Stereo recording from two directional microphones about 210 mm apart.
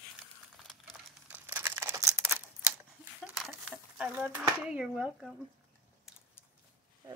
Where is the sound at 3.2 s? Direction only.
Centre (ahead or behind).